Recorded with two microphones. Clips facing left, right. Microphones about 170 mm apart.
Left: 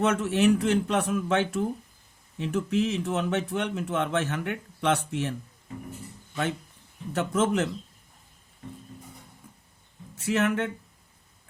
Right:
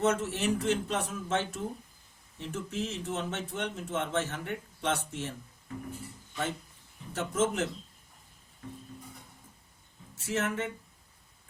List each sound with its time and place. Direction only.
0.0 s a man's voice: 65° left (ahead or behind)
7.1 s a man's voice: 65° left (ahead or behind)
10.2 s a man's voice: 65° left (ahead or behind)